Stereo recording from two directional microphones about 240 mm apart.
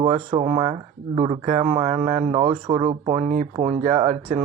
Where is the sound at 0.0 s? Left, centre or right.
Right.